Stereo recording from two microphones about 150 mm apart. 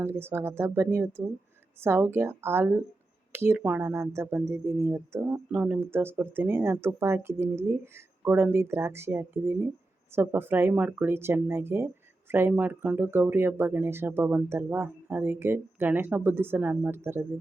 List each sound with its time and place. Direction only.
0.0 s speech: 15° right (ahead or behind)